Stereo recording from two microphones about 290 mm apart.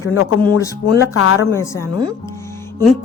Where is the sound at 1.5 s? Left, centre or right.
Centre.